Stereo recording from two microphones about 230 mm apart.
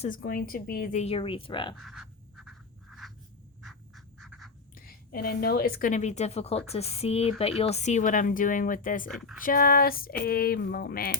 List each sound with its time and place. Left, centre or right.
0.0 s speech: left
1.7 s a sound: centre
3.6 s duck: centre
4.9 s speech: left
9.0 s speech: centre
9.4 s speech: left